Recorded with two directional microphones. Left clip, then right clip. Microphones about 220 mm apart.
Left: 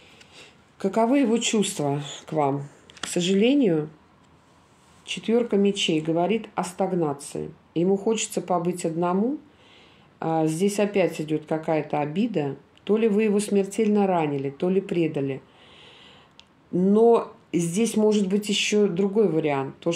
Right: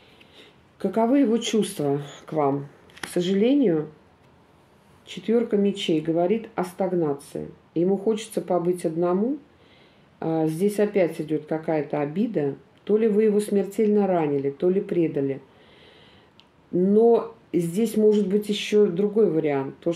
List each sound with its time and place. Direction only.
0.4 s speech: 50° left (ahead or behind)
5.0 s speech: 50° left (ahead or behind)
10.1 s speech: 50° left (ahead or behind)
16.9 s speech: 50° left (ahead or behind)